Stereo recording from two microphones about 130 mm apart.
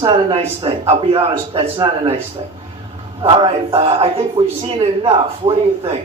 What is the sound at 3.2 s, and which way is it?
A man's voice, 45° right (ahead or behind).